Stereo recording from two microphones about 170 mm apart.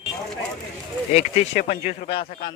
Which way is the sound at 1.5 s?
50° left (ahead or behind).